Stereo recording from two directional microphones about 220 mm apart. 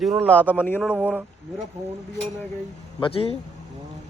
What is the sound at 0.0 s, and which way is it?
Speech, centre (ahead or behind).